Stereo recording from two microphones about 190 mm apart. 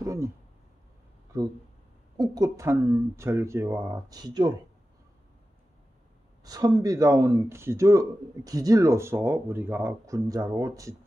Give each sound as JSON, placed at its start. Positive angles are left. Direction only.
{"t": 0.0, "sound": "a sound", "side_deg": -15}
{"t": 2.1, "sound": "speech", "side_deg": -20}
{"t": 6.4, "sound": "speech", "side_deg": -20}